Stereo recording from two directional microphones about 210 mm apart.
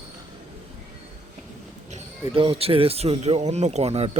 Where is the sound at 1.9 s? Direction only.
25° right (ahead or behind).